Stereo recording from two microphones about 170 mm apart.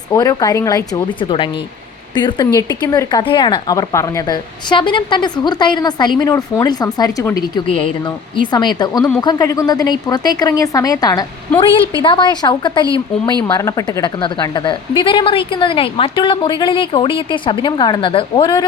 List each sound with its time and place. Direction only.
0.1 s a woman's voice: 20° left (ahead or behind)